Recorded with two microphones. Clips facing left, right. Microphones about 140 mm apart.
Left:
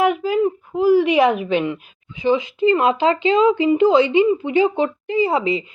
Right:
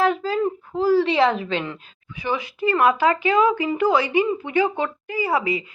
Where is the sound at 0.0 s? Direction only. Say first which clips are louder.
Left 3 dB; 15° left (ahead or behind).